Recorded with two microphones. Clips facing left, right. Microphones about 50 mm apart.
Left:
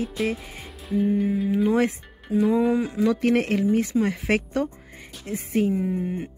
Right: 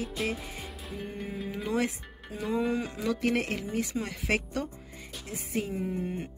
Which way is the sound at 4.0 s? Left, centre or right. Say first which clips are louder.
Left 7 dB; left.